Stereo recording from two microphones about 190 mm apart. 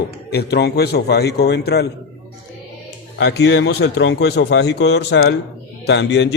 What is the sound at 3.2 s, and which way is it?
A man's voice, 60° left (ahead or behind).